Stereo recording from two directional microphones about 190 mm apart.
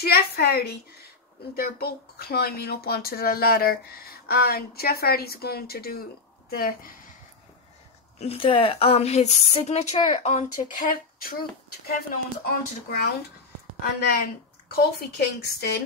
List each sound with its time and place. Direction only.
0.0 s a woman's voice: 55° left (ahead or behind)
8.2 s speech: 30° left (ahead or behind)
12.1 s a woman's voice: 50° left (ahead or behind)